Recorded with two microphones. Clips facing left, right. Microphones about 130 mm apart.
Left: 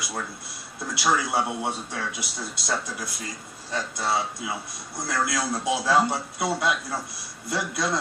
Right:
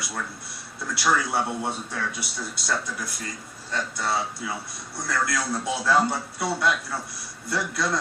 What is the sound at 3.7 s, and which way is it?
A man's voice, 15° left (ahead or behind).